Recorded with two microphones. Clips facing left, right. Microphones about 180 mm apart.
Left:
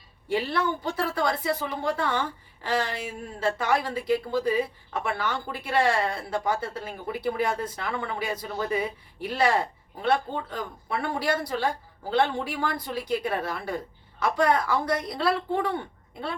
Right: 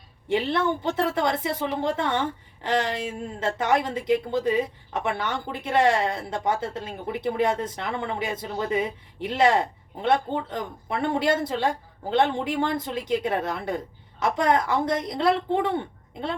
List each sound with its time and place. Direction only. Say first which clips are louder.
0.3 s speech: right 3 dB; 25° right (ahead or behind)